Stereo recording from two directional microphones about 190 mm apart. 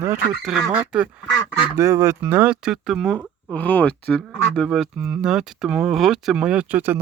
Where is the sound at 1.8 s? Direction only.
15° right (ahead or behind).